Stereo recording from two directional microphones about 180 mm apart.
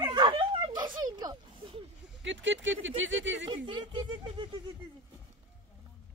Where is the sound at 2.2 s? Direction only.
90° right.